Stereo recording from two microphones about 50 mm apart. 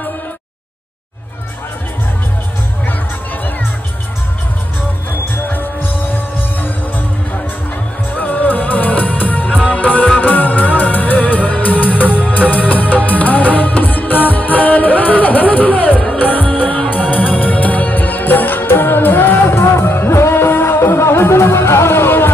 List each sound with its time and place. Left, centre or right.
5.3 s music: left
8.2 s music: left